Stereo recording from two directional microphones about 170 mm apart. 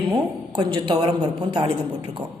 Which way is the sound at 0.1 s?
25° right (ahead or behind).